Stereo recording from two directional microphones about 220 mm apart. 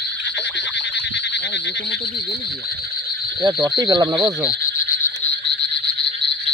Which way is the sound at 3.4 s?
20° right (ahead or behind).